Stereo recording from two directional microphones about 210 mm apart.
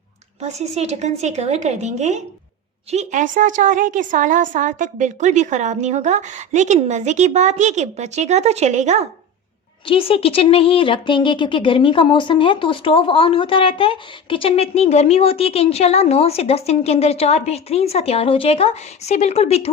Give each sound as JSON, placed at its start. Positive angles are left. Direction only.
{"t": 0.4, "sound": "a woman's voice", "side_deg": -30}
{"t": 9.8, "sound": "speech", "side_deg": 25}